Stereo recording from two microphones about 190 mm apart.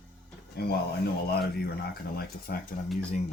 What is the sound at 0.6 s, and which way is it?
Speech, 55° left (ahead or behind).